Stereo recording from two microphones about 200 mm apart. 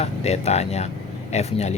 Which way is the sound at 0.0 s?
30° left (ahead or behind).